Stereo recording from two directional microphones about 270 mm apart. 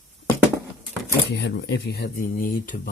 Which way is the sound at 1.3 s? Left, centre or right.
Left.